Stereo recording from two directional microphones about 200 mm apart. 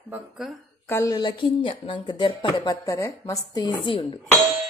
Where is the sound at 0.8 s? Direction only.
15° left (ahead or behind).